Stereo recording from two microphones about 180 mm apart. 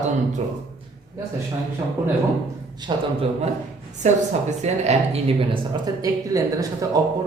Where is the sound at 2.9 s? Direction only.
25° right (ahead or behind).